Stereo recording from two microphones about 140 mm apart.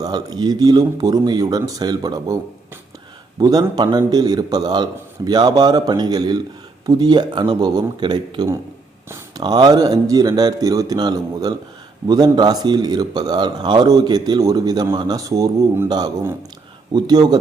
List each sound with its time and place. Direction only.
0.0 s a man's voice: 30° right (ahead or behind)
3.3 s a man's voice: 30° right (ahead or behind)